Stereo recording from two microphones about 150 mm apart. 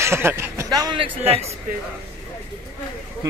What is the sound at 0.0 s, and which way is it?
Speech, 15° right (ahead or behind).